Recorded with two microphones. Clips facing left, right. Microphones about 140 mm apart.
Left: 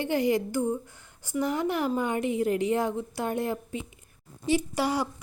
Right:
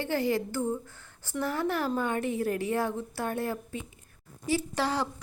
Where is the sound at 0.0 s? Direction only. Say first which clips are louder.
Left 3 dB; 15° left (ahead or behind).